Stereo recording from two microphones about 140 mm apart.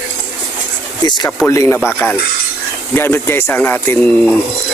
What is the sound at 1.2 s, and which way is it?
Speech, 20° left (ahead or behind).